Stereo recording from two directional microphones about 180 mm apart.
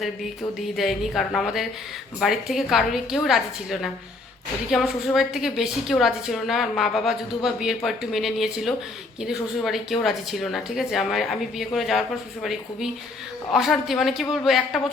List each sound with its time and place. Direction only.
0.8 s a woman's voice: centre (ahead or behind)